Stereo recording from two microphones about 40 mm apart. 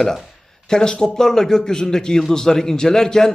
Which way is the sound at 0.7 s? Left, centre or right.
Centre.